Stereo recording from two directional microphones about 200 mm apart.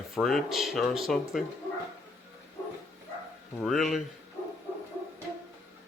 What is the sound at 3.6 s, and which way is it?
Speech, centre (ahead or behind).